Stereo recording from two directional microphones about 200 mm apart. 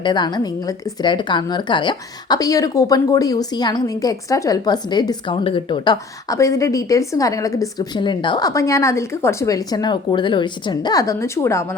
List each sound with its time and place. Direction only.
0.0 s a woman's voice: 20° left (ahead or behind)